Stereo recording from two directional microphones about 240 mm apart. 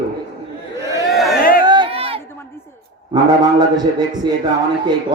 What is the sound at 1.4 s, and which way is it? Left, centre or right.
Chatter, left.